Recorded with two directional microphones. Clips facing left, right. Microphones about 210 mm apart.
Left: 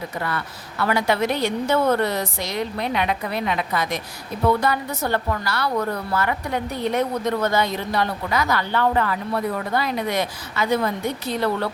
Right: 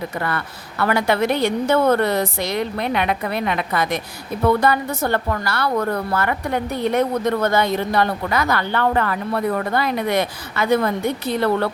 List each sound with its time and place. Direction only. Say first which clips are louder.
0.2 s a woman's voice: right 3 dB; 55° right (ahead or behind)